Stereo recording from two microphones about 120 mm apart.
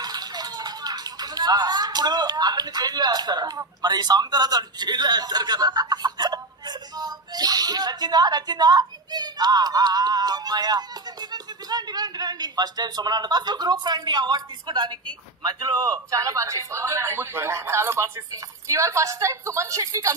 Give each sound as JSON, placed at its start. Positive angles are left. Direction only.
{"t": 0.0, "sound": "speech", "side_deg": -35}